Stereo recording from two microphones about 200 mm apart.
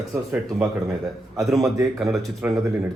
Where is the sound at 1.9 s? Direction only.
Centre (ahead or behind).